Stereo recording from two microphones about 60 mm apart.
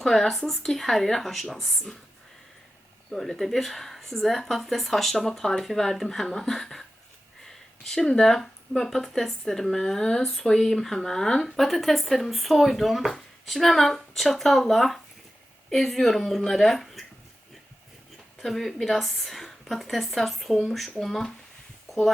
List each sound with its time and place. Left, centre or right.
0.0 s speech: centre
3.1 s speech: centre
7.9 s speech: centre
18.3 s speech: centre
21.8 s a sound: centre